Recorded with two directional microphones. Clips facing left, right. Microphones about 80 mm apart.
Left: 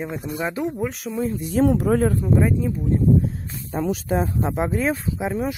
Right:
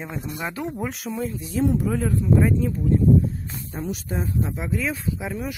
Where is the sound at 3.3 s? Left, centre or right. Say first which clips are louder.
Left 4 dB; left.